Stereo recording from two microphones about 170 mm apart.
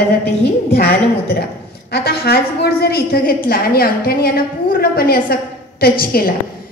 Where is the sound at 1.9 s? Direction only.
70° left (ahead or behind).